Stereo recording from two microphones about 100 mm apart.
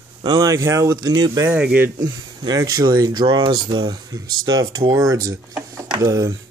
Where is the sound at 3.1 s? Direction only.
50° right (ahead or behind).